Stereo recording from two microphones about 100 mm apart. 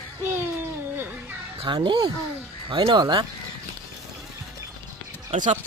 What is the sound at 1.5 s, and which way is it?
Speech, 60° right (ahead or behind).